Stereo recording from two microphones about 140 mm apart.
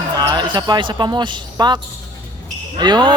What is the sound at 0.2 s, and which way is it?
Speech, 30° right (ahead or behind).